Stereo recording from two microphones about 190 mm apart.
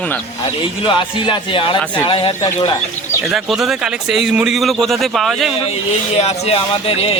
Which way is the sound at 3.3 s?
Centre (ahead or behind).